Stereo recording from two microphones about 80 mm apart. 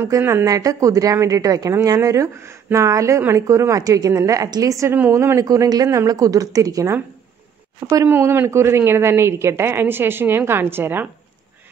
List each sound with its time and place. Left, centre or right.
0.2 s speech: right
0.5 s a woman's voice: right
5.4 s a woman's voice: right
8.1 s speech: right